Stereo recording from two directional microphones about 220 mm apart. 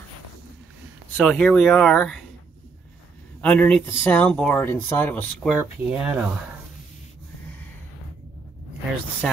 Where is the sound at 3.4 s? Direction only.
5° left (ahead or behind).